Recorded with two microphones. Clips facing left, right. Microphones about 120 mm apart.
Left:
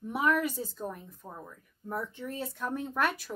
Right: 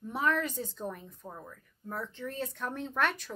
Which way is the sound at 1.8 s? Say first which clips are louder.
Left 2 dB; 15° left (ahead or behind).